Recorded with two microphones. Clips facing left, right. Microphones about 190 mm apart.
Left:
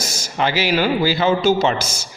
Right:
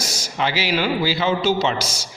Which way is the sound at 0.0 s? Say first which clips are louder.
Left 3 dB; 50° left (ahead or behind).